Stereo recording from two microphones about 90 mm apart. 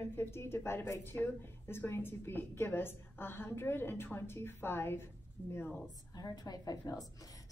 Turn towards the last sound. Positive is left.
turn(degrees=45)  # may be behind; listen again after turning